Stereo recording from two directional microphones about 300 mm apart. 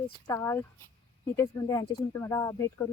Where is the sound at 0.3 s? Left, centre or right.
Centre.